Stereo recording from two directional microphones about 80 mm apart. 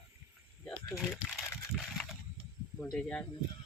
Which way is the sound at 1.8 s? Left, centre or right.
Centre.